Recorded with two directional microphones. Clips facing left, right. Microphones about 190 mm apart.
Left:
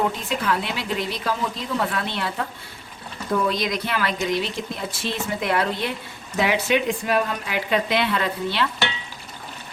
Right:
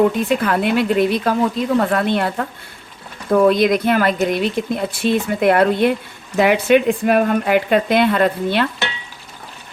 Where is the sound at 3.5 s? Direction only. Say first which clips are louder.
Right 10 dB; 55° right (ahead or behind).